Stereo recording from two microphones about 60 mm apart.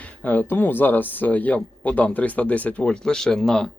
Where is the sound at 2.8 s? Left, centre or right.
Centre.